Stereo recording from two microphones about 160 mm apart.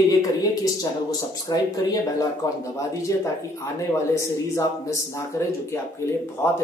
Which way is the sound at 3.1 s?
20° left (ahead or behind).